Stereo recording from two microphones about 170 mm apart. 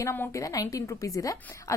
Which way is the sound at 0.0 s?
15° left (ahead or behind).